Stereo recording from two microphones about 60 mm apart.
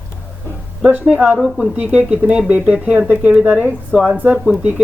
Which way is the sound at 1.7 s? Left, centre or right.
Right.